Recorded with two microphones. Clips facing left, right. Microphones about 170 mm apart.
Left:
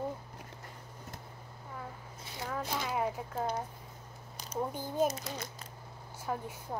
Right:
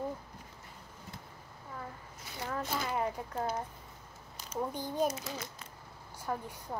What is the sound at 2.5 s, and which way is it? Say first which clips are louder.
Speech: even; centre (ahead or behind).